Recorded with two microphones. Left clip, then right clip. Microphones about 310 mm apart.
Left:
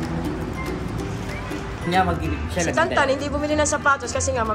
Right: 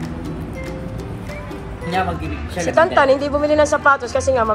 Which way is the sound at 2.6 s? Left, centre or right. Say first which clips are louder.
Right 6 dB; centre.